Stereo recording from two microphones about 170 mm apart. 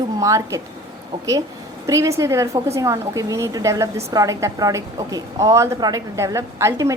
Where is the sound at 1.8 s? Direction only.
20° right (ahead or behind).